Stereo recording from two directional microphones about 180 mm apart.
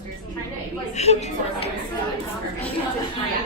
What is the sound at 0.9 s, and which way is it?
Speech, 40° left (ahead or behind).